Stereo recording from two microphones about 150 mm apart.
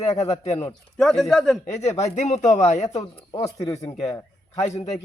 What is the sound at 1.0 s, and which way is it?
Speech, 5° left (ahead or behind).